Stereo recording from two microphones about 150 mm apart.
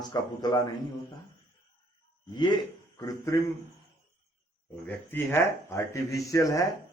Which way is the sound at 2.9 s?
20° left (ahead or behind).